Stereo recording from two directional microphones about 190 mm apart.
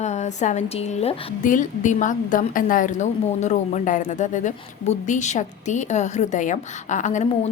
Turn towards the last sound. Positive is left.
turn(degrees=40)  # may be behind; listen again after turning